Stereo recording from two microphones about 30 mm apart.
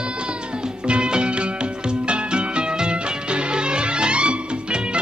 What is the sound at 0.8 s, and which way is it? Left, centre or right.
Music, right.